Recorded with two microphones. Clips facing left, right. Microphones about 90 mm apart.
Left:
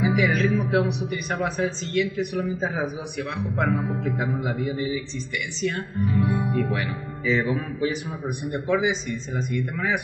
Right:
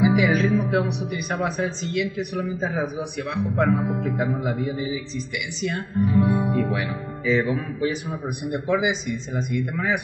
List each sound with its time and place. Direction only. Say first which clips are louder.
0.0 s speech: right 3 dB; 5° right (ahead or behind)
6.2 s music: right 3 dB; 20° right (ahead or behind)
6.5 s speech: right 1 dB; 5° right (ahead or behind)